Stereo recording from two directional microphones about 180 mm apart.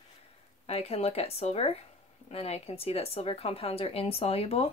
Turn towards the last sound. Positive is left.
turn(degrees=35)  # may be behind; listen again after turning